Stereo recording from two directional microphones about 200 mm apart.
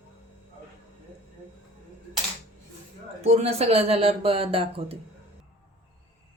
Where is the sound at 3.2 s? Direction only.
30° right (ahead or behind).